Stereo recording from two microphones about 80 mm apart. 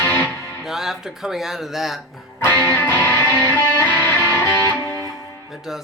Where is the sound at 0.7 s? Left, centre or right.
Centre.